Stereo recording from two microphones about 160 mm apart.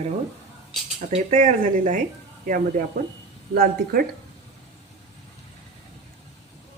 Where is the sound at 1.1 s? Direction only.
50° right (ahead or behind); by 4.0 s 65° right (ahead or behind).